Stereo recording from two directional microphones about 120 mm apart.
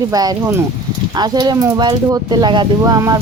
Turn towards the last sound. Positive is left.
turn(degrees=-30)  # may be behind; listen again after turning